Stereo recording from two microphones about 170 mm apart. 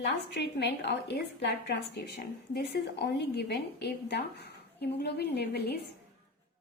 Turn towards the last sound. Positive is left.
turn(degrees=75)  # may be behind; listen again after turning